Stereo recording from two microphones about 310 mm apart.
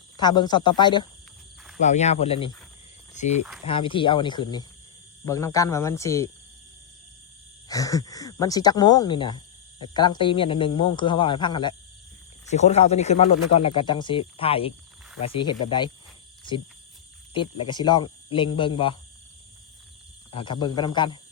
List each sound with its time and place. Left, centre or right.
0.2 s speech: centre
3.7 s speech: centre
7.7 s speech: centre
17.3 s speech: centre
20.3 s speech: centre